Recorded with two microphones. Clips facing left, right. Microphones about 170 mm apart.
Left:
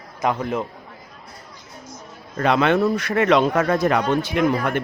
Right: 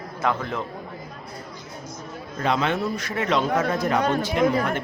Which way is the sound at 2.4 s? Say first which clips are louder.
Left 6 dB; 65° left (ahead or behind).